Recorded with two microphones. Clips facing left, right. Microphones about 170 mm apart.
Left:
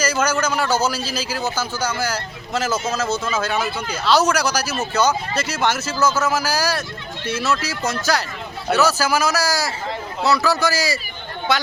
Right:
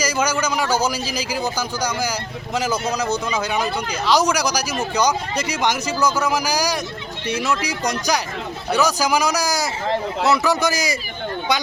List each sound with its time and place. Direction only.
0.0 s a man's voice: 10° right (ahead or behind)